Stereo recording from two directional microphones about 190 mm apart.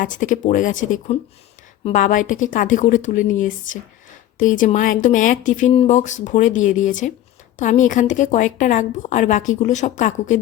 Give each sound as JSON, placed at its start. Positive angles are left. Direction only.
{"t": 0.0, "sound": "speech", "side_deg": 40}